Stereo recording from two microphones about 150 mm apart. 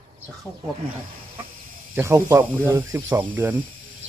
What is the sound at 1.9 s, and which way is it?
Speech, 20° right (ahead or behind).